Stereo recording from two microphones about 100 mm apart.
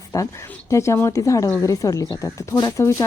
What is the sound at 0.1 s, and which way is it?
Speech, 35° left (ahead or behind).